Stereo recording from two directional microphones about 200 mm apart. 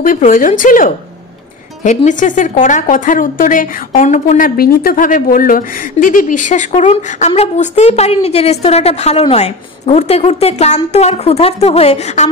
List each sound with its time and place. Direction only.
0.0 s a woman's voice: 40° left (ahead or behind)